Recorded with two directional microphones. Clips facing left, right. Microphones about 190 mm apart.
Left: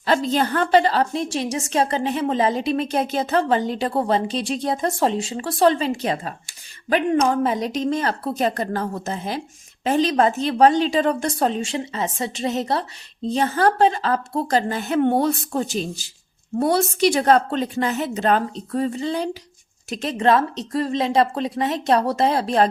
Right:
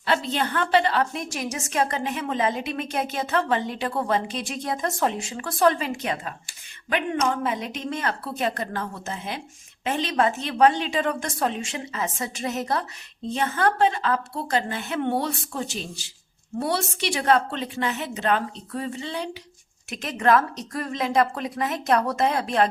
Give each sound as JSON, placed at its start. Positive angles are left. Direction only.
{"t": 0.0, "sound": "a woman's voice", "side_deg": 40}
{"t": 19.9, "sound": "a woman's voice", "side_deg": 30}